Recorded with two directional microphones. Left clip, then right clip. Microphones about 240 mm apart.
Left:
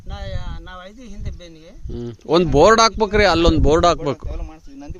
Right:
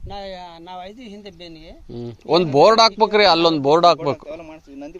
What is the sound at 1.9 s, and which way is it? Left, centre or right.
A man's voice, left.